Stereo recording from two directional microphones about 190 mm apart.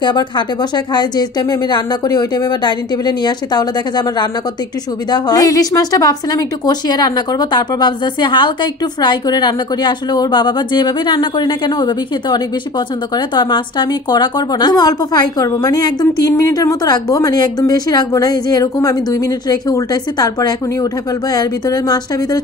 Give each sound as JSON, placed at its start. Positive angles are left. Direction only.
{"t": 0.0, "sound": "a woman's voice", "side_deg": 20}